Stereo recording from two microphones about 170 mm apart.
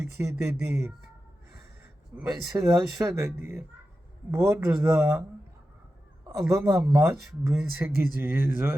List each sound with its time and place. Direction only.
0.0 s speech: 15° right (ahead or behind)
2.1 s speech: 15° right (ahead or behind)
6.6 s speech: 10° right (ahead or behind)